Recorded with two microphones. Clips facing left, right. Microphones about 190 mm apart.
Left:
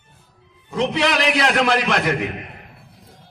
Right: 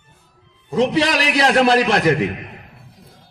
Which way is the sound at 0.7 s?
35° right (ahead or behind).